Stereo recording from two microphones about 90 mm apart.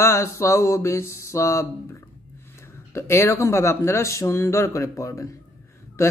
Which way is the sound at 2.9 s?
30° left (ahead or behind).